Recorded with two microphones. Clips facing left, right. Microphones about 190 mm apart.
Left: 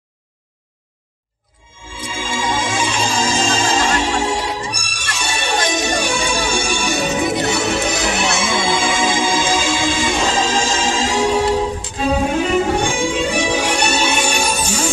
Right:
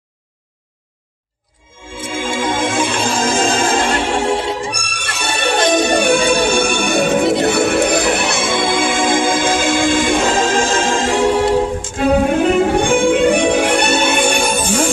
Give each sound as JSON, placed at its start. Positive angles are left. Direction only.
{"t": 2.0, "sound": "music", "side_deg": -55}